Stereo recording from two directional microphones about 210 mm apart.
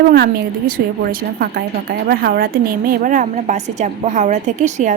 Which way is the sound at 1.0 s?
45° right (ahead or behind).